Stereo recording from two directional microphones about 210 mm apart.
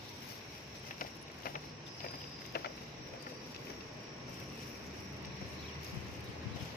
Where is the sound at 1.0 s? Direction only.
40° left (ahead or behind).